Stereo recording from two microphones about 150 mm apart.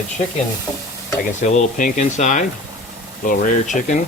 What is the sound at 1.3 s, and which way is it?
Speech, 55° left (ahead or behind).